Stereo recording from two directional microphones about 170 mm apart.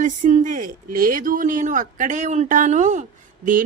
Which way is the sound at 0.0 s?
45° right (ahead or behind).